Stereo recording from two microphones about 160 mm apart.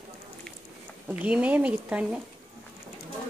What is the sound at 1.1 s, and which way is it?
Speech, 10° right (ahead or behind).